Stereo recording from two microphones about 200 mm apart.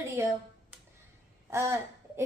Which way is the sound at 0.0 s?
10° right (ahead or behind).